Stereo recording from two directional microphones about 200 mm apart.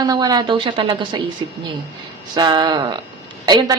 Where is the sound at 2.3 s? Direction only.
20° right (ahead or behind).